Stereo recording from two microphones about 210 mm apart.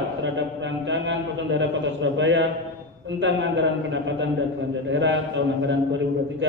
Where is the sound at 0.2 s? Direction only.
60° right (ahead or behind).